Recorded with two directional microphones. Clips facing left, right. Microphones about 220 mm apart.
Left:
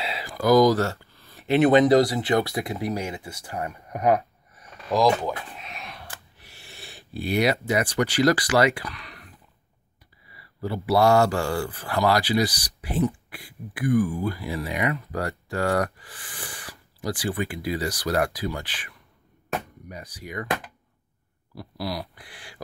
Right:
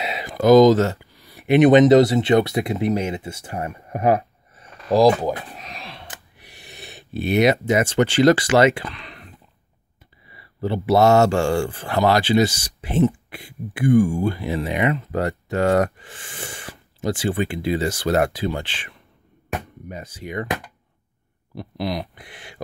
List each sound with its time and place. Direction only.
0.0 s speech: 20° right (ahead or behind)
6.3 s speech: 15° right (ahead or behind)
10.3 s speech: 25° right (ahead or behind)
21.5 s speech: 20° right (ahead or behind)